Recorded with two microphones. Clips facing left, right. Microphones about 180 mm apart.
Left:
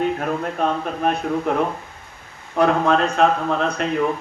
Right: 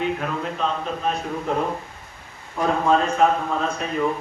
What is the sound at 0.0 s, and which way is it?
A man's voice, 50° left (ahead or behind).